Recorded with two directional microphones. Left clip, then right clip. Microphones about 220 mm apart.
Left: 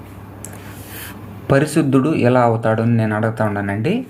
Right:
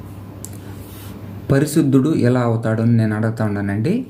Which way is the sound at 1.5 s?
15° right (ahead or behind).